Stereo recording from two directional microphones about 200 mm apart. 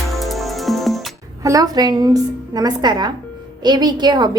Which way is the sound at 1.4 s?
15° right (ahead or behind).